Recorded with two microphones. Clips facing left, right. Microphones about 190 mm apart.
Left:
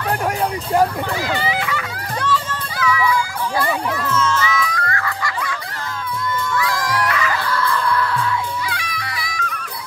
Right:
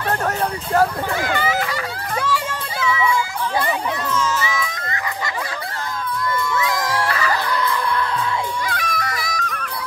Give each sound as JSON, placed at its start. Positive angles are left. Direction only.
{"t": 0.7, "sound": "a sound", "side_deg": 5}
{"t": 1.3, "sound": "a sound", "side_deg": -45}
{"t": 2.8, "sound": "music", "side_deg": -25}
{"t": 4.0, "sound": "music", "side_deg": 0}
{"t": 4.3, "sound": "music", "side_deg": -20}
{"t": 7.3, "sound": "music", "side_deg": -20}
{"t": 8.6, "sound": "music", "side_deg": -45}